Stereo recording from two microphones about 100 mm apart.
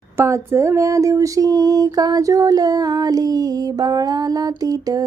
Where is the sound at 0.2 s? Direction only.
30° right (ahead or behind).